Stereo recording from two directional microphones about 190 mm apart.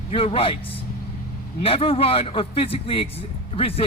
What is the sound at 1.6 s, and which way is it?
Speech, 30° left (ahead or behind).